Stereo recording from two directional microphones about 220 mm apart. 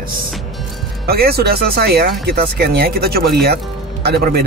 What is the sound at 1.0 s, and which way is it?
Speech, 45° right (ahead or behind).